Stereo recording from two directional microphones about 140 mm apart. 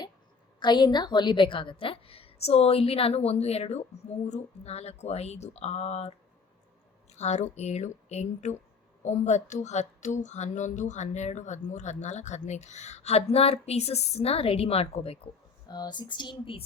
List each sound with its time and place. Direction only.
0.6 s a woman's voice: 30° left (ahead or behind); by 6.1 s 50° left (ahead or behind)
7.2 s a woman's voice: 55° left (ahead or behind)
15.6 s speech: 30° left (ahead or behind)